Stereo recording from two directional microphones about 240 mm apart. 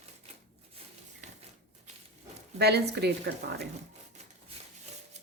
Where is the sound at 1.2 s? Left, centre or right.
Right.